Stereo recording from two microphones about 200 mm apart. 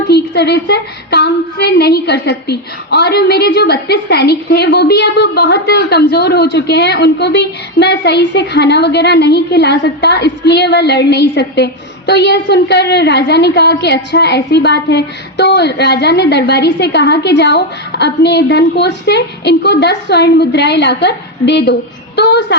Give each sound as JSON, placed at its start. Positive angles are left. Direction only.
{"t": 0.1, "sound": "a woman's voice", "side_deg": 55}